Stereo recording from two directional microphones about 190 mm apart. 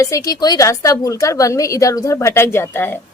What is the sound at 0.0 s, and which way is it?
A woman's voice, 15° left (ahead or behind).